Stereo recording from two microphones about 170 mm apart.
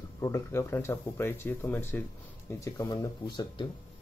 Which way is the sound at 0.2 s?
15° left (ahead or behind).